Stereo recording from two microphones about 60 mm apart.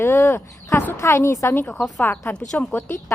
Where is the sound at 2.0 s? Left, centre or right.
Left.